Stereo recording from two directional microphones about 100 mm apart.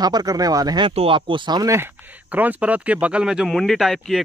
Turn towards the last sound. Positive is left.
turn(degrees=0)  # may be behind; listen again after turning